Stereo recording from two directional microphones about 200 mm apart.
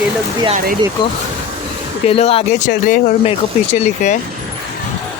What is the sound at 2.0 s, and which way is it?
Speech, 30° left (ahead or behind).